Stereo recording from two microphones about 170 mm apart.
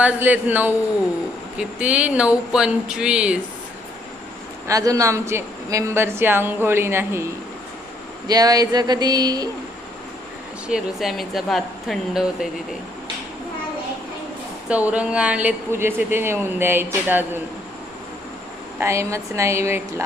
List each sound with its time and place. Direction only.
0.0 s speech: 10° right (ahead or behind)
4.7 s speech: 20° right (ahead or behind)
8.3 s a sound: 20° right (ahead or behind)
10.7 s a woman's voice: centre (ahead or behind)
14.7 s speech: 10° right (ahead or behind)
18.8 s speech: 15° right (ahead or behind)